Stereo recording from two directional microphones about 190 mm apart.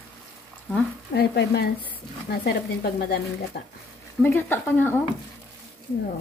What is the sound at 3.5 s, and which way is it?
Speech, 50° left (ahead or behind).